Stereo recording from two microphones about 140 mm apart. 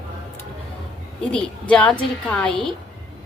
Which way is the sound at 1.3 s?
5° left (ahead or behind).